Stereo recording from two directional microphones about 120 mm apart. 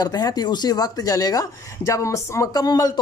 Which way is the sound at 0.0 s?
35° left (ahead or behind).